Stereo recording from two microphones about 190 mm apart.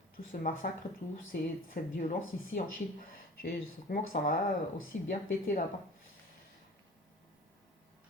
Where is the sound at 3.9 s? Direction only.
45° left (ahead or behind).